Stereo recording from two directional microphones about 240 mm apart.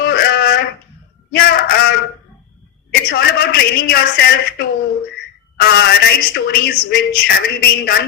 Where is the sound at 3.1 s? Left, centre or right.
Left.